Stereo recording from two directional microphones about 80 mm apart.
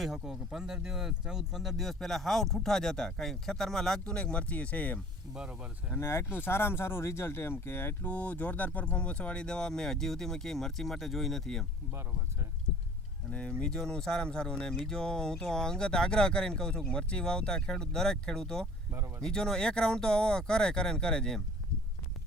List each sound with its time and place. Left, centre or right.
0.0 s speech: centre
5.3 s speech: centre
6.0 s speech: left; by 11.6 s centre
13.6 s speech: centre